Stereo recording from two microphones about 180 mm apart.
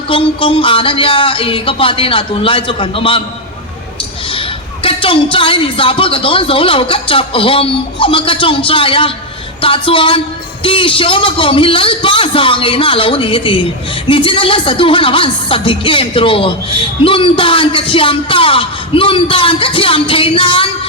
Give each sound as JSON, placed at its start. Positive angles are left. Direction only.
{"t": 0.1, "sound": "a woman's voice", "side_deg": 30}
{"t": 4.4, "sound": "a woman's voice", "side_deg": 30}